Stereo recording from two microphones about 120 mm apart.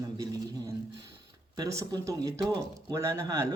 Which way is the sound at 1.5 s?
35° right (ahead or behind).